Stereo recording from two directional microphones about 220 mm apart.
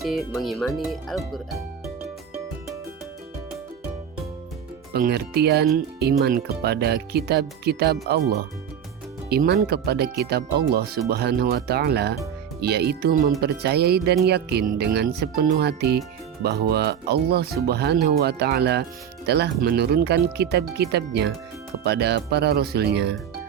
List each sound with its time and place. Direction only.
0.0 s speech: centre (ahead or behind)
4.9 s speech: 45° right (ahead or behind)